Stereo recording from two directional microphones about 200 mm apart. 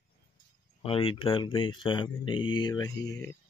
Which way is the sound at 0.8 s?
25° left (ahead or behind).